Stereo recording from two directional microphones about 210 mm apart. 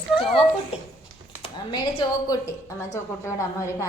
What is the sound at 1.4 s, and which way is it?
A woman's voice, 20° left (ahead or behind).